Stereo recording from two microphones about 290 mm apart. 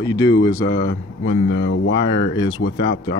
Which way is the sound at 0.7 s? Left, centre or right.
Left.